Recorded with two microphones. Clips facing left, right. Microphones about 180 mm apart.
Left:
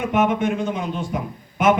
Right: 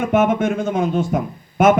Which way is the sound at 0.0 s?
45° right (ahead or behind).